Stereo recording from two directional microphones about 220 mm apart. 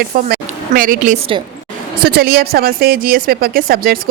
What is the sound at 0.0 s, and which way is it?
A woman's voice, 40° right (ahead or behind).